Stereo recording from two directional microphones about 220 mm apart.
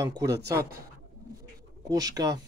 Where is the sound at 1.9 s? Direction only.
15° right (ahead or behind).